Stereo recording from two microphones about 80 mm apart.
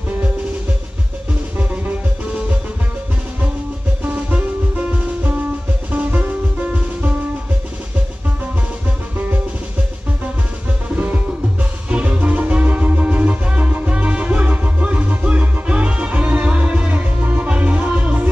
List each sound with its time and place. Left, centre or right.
4.0 s music: centre
11.9 s music: centre